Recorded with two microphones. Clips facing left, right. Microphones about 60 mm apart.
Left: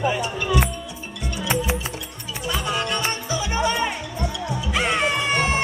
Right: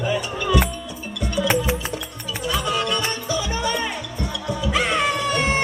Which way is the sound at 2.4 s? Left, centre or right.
Left.